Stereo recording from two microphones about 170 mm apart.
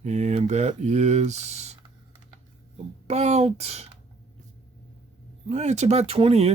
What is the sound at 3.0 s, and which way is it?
Speech, 40° right (ahead or behind).